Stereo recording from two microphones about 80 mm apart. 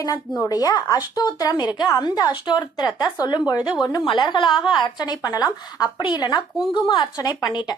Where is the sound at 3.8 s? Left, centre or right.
Left.